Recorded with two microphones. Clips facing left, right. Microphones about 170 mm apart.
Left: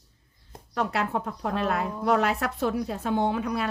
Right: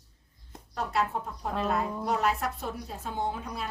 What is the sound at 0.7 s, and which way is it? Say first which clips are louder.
Speech: left 3 dB; 80° left.